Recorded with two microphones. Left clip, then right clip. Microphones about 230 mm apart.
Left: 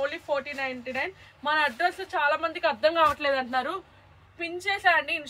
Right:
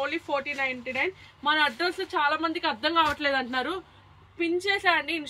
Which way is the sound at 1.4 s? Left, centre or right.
Left.